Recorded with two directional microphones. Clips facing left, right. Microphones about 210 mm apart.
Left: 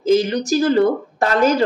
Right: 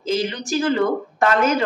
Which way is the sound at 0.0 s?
45° left (ahead or behind).